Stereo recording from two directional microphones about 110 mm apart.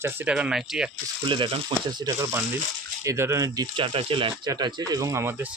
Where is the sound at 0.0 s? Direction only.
20° right (ahead or behind).